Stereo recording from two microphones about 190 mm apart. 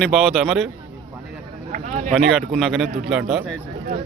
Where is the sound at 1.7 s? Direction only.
40° right (ahead or behind).